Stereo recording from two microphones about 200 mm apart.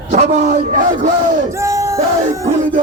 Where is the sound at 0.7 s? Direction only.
40° right (ahead or behind).